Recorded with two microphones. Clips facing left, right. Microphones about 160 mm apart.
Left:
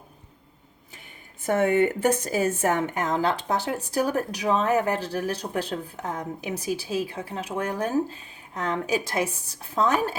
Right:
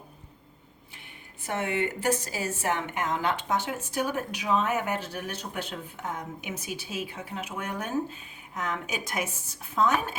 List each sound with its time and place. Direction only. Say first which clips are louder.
1.4 s speech: left 8 dB; 50° left (ahead or behind)